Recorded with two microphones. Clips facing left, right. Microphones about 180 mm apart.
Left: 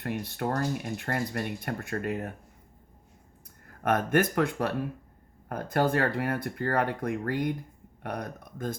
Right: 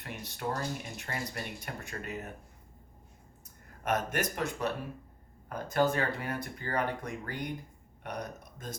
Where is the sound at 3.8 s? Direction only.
55° left (ahead or behind).